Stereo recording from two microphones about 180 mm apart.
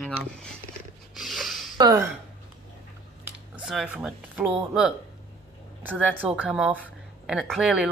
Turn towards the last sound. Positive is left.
turn(degrees=-5)  # may be behind; listen again after turning